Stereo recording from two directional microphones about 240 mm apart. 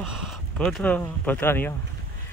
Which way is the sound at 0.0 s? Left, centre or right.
Centre.